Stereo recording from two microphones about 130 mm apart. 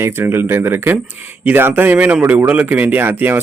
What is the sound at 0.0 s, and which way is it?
A man's voice, 15° right (ahead or behind).